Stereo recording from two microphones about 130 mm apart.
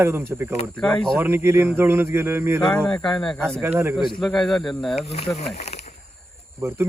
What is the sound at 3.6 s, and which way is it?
Speech, 15° right (ahead or behind).